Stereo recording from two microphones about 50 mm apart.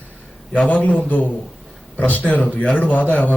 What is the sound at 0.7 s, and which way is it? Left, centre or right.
A man's voice, left.